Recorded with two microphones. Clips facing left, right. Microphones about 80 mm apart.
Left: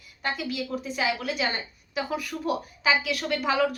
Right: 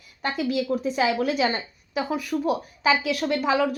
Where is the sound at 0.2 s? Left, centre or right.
Right.